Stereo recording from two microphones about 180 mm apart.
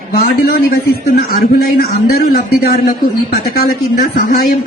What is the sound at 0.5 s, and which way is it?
A man's voice, 55° left (ahead or behind).